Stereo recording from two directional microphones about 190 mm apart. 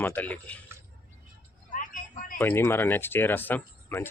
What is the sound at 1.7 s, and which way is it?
Vehicle, 45° left (ahead or behind).